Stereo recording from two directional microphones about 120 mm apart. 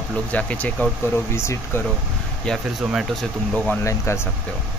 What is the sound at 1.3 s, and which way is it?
Speech, 20° left (ahead or behind).